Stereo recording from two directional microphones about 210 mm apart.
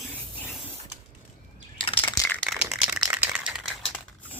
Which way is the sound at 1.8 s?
25° left (ahead or behind).